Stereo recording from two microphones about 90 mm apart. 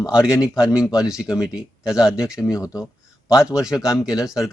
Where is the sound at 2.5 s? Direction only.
40° left (ahead or behind).